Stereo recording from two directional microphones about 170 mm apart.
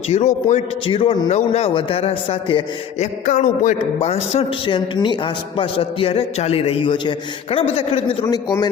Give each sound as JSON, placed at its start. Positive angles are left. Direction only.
{"t": 0.1, "sound": "a man's voice", "side_deg": 40}
{"t": 0.9, "sound": "a man's voice", "side_deg": 30}
{"t": 1.3, "sound": "a man's voice", "side_deg": 40}
{"t": 3.2, "sound": "a man's voice", "side_deg": 50}
{"t": 4.0, "sound": "a man's voice", "side_deg": 35}
{"t": 8.3, "sound": "a man's voice", "side_deg": 25}